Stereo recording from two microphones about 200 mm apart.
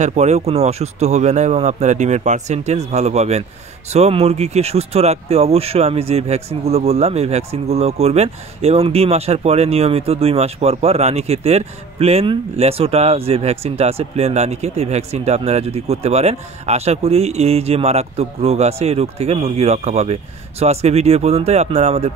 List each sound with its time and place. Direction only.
0.0 s speech: 35° right (ahead or behind)